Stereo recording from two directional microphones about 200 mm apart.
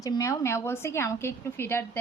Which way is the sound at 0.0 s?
15° left (ahead or behind).